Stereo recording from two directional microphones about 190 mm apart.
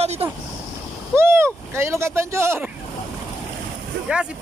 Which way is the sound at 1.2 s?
15° right (ahead or behind).